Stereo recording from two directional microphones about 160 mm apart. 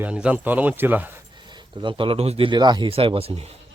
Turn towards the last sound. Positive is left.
turn(degrees=-35)  # may be behind; listen again after turning